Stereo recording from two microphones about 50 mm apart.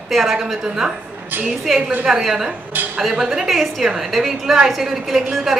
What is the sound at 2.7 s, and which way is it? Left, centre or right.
Speech, right.